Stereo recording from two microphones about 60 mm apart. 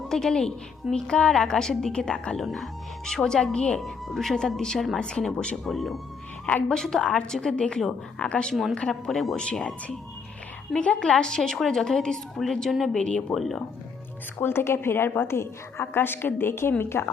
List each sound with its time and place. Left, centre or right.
0.1 s a woman's voice: centre
2.3 s a woman's voice: centre
5.6 s a woman's voice: centre
9.0 s a woman's voice: centre
10.8 s a woman's voice: centre
13.3 s speech: centre
14.3 s a woman's voice: left